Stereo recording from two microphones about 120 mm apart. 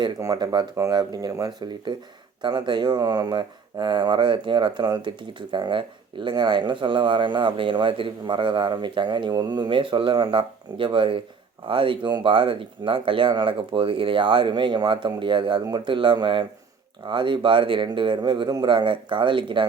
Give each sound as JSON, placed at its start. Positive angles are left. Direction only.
{"t": 0.0, "sound": "speech", "side_deg": -35}